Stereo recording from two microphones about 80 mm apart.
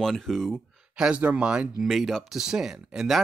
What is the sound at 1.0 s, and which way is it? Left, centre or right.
Speech, centre.